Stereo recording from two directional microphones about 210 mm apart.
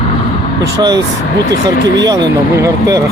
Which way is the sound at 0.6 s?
20° right (ahead or behind).